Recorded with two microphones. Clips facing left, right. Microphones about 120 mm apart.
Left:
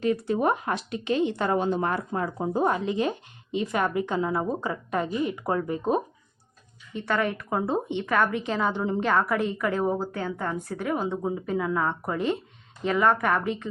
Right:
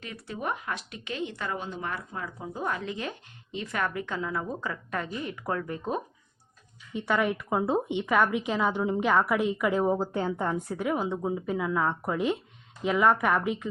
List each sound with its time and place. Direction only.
0.0 s speech: 35° left (ahead or behind)
1.5 s speech: 40° left (ahead or behind)
2.6 s speech: 25° left (ahead or behind)
6.9 s a woman's voice: 15° right (ahead or behind)
10.1 s a woman's voice: 25° right (ahead or behind)
10.5 s a woman's voice: 10° right (ahead or behind)